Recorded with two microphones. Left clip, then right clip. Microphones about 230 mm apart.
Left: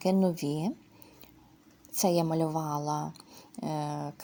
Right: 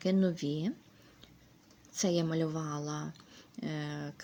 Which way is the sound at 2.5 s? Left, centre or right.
Left.